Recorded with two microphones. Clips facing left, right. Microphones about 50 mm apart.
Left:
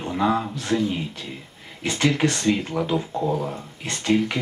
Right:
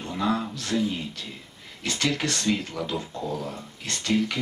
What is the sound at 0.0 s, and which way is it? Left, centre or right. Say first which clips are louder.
Speech: left 4 dB; left.